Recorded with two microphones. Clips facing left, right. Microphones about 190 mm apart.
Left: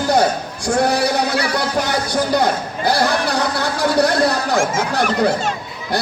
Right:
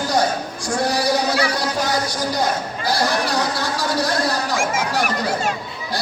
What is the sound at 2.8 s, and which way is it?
A man's voice, 60° left (ahead or behind).